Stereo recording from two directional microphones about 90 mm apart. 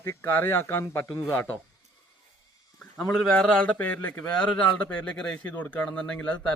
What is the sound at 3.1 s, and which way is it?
Speech, 10° left (ahead or behind).